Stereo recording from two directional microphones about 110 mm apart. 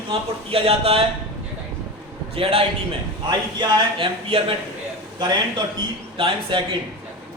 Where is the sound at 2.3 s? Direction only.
60° right (ahead or behind).